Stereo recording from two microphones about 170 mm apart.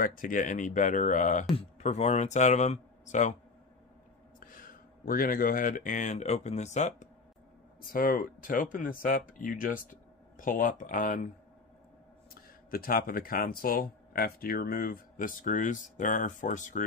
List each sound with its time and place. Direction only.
0.0 s speech: 50° left (ahead or behind)
4.4 s speech: 55° left (ahead or behind)
7.9 s speech: 55° left (ahead or behind)
12.7 s speech: 60° left (ahead or behind)